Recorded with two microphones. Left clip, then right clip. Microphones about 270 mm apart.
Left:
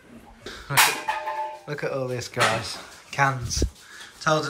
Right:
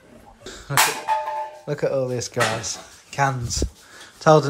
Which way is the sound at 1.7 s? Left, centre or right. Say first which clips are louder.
Right 8 dB; centre.